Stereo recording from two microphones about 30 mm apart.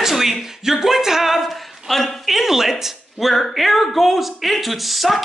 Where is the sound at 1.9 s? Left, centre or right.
Centre.